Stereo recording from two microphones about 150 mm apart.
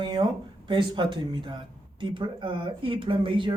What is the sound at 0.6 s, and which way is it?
Speech, 30° right (ahead or behind).